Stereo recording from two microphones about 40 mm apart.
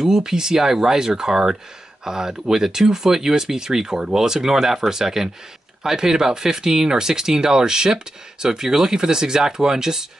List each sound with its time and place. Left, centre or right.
0.0 s speech: centre